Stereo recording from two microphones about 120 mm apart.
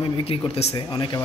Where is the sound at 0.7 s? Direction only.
35° left (ahead or behind).